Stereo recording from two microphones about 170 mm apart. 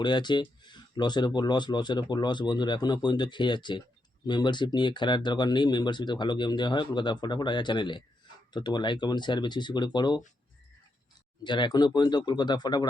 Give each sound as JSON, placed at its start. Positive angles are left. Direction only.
{"t": 0.0, "sound": "speech", "side_deg": 25}
{"t": 11.4, "sound": "speech", "side_deg": 25}